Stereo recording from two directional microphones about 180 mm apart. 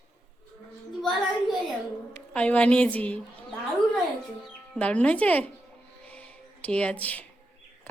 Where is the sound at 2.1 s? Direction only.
10° left (ahead or behind).